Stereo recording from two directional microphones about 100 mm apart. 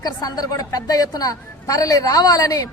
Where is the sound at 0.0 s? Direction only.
40° left (ahead or behind).